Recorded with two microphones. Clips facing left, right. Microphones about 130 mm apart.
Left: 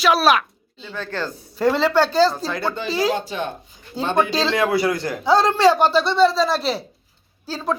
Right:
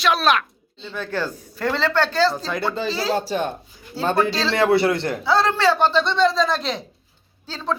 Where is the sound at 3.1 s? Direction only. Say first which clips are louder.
Right 3 dB; 40° right (ahead or behind).